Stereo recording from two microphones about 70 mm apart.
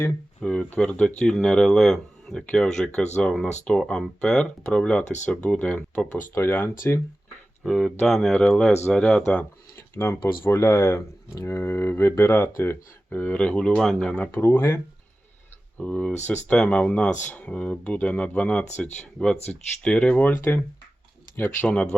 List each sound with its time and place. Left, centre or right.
0.3 s a sound: centre
0.9 s speech: centre
6.3 s speech: left
7.6 s speech: centre
8.3 s speech: centre
9.7 s speech: left; by 13.9 s centre
14.0 s speech: centre
14.3 s speech: left
15.8 s speech: centre; by 21.7 s left